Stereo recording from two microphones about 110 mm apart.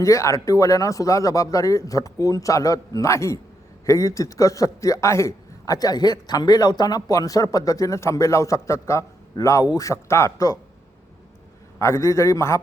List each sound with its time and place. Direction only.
0.0 s a man's voice: 30° left (ahead or behind)
11.8 s a man's voice: 25° left (ahead or behind)